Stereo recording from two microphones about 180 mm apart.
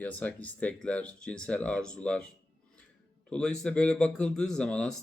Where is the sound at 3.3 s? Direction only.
5° left (ahead or behind).